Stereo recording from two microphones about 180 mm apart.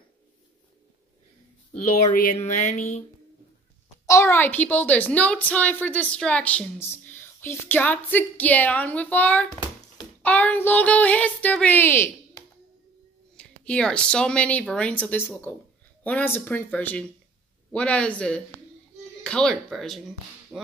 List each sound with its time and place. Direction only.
2.0 s speech: 45° left (ahead or behind)
4.0 s a woman's voice: 15° left (ahead or behind)
13.4 s a woman's voice: 5° left (ahead or behind)